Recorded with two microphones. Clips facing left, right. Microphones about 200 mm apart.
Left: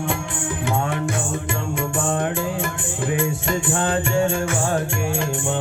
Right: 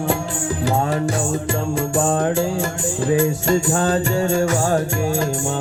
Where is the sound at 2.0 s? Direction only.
40° right (ahead or behind).